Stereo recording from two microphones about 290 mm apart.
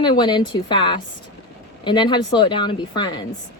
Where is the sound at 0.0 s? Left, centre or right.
Centre.